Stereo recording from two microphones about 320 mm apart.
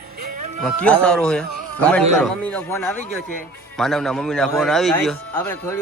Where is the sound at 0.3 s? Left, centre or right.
Right.